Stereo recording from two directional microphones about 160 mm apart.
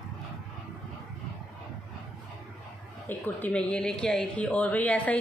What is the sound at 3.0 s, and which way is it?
A woman's voice, 10° left (ahead or behind).